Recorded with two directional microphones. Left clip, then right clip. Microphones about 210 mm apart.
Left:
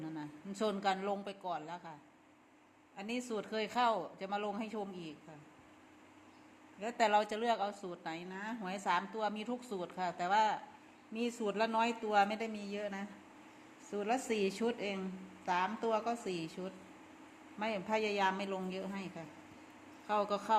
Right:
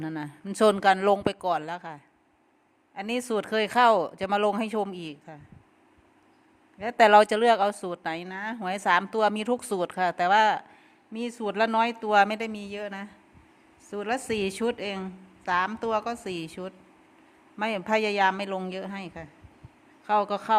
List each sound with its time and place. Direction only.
0.0 s speech: 55° right (ahead or behind)
6.7 s speech: 55° right (ahead or behind); by 13.1 s 35° right (ahead or behind)
13.9 s speech: 45° right (ahead or behind)